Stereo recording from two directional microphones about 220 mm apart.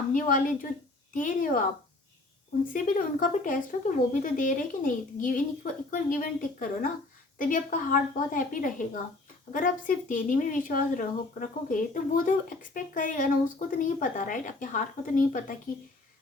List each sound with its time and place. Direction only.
0.1 s speech: 40° left (ahead or behind)
2.7 s speech: 40° left (ahead or behind)